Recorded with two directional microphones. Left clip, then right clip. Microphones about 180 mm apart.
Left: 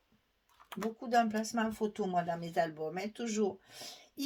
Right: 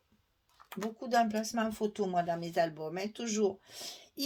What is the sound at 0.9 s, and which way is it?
Speech, 45° right (ahead or behind).